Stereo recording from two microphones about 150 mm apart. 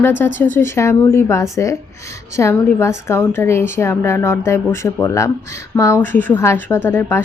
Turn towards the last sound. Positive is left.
turn(degrees=15)  # may be behind; listen again after turning